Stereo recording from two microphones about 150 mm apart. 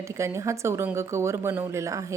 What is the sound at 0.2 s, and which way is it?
A woman's voice, 20° right (ahead or behind).